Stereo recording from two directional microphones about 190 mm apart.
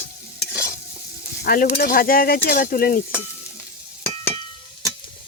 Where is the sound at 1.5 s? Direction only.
50° left (ahead or behind).